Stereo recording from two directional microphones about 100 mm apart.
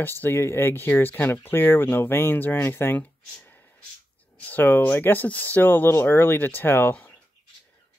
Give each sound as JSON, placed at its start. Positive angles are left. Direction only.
{"t": 0.2, "sound": "speech", "side_deg": 25}
{"t": 3.3, "sound": "a sound", "side_deg": 15}
{"t": 4.4, "sound": "speech", "side_deg": 15}